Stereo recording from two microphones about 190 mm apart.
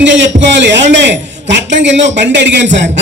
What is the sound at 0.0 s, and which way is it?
A man's voice, 70° right (ahead or behind).